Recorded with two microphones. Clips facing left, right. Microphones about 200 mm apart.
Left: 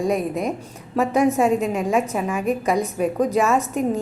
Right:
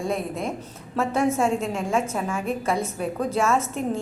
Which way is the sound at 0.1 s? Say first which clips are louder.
Left 5 dB; 15° left (ahead or behind).